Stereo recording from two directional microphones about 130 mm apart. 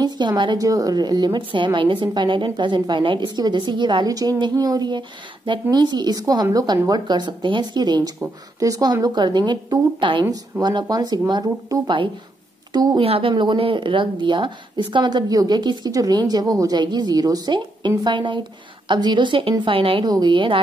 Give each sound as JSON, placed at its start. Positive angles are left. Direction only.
{"t": 0.0, "sound": "a woman's voice", "side_deg": -35}
{"t": 13.0, "sound": "a woman's voice", "side_deg": -50}
{"t": 13.3, "sound": "a woman's voice", "side_deg": -40}